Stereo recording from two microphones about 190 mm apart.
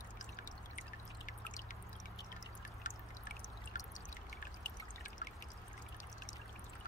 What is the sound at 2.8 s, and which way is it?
Pour, 45° left (ahead or behind).